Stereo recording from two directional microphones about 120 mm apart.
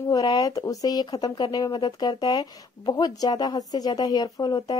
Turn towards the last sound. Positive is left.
turn(degrees=35)  # may be behind; listen again after turning